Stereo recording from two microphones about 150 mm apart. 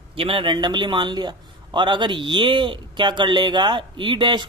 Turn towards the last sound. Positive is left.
turn(degrees=-30)  # may be behind; listen again after turning